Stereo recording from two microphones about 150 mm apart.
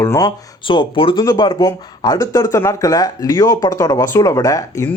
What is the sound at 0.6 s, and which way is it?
Speech, 35° left (ahead or behind).